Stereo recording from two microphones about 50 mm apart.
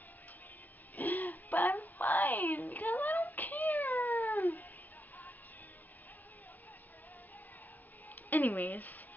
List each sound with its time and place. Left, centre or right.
0.9 s music: left
2.0 s cat: left
8.3 s speech: left